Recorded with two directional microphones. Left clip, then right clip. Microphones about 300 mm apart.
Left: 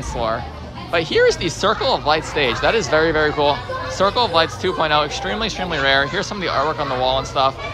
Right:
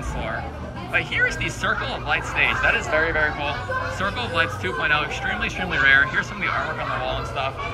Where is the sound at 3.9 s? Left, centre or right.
Centre.